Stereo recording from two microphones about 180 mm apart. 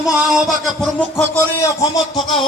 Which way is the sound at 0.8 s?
10° left (ahead or behind).